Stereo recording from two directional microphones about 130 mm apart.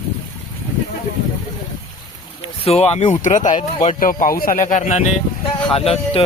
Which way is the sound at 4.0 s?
90° left.